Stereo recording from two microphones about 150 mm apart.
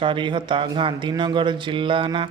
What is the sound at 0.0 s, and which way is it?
Speech, 35° right (ahead or behind).